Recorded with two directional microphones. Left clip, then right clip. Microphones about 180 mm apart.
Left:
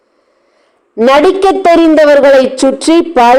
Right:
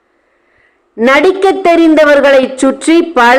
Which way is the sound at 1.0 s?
20° left (ahead or behind).